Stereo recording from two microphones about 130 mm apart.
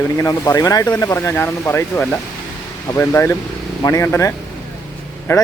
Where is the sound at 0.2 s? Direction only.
25° left (ahead or behind).